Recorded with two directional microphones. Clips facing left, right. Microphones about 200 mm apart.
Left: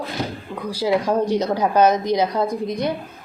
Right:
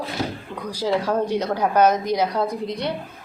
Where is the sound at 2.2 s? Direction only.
10° left (ahead or behind).